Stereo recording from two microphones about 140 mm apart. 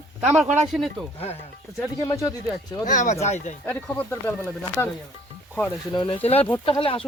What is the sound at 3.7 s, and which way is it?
Speech, 15° left (ahead or behind).